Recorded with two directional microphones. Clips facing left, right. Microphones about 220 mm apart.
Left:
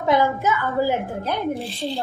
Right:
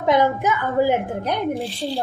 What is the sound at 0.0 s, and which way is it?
A woman's voice, 15° right (ahead or behind).